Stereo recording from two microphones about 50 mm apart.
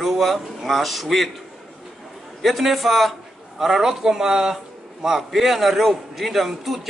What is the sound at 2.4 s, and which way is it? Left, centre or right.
A man's voice, centre.